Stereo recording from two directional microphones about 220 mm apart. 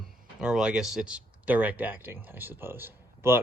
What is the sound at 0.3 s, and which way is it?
Speech, 5° right (ahead or behind).